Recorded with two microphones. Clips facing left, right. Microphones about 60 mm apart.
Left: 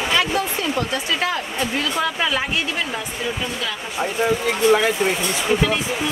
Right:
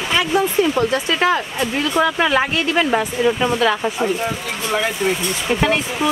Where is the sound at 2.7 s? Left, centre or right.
Right.